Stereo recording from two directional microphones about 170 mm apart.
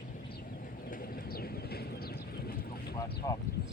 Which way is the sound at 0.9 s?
60° left (ahead or behind).